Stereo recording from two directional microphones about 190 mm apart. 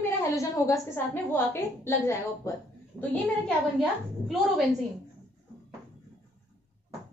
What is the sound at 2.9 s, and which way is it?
A woman's voice, centre (ahead or behind).